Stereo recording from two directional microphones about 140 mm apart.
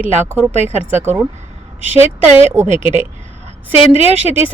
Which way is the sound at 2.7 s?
55° right (ahead or behind).